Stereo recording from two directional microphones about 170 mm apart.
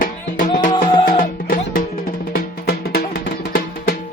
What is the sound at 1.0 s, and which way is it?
Music, 55° left (ahead or behind).